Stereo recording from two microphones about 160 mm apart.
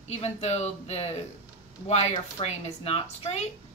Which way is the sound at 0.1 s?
45° left (ahead or behind).